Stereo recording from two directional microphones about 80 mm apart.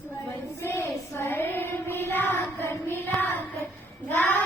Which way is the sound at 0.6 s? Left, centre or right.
Left.